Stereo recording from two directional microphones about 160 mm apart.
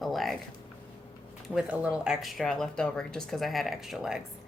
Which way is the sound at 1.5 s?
10° right (ahead or behind).